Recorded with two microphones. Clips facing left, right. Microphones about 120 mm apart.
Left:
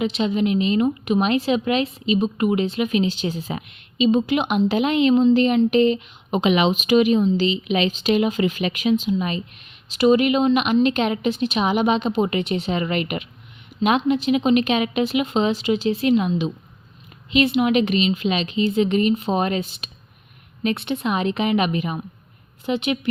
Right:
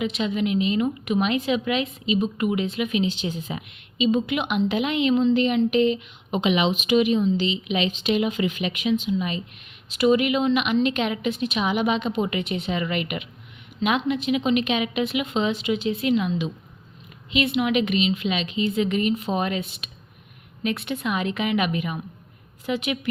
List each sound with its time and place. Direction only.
0.0 s a woman's voice: 30° left (ahead or behind)
9.9 s a woman's voice: 30° left (ahead or behind)